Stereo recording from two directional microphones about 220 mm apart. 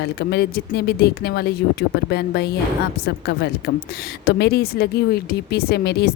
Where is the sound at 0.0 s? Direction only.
50° left (ahead or behind).